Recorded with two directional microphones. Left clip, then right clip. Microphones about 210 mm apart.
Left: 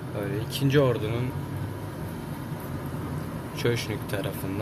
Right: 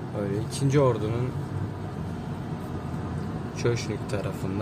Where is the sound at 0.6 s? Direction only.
20° right (ahead or behind).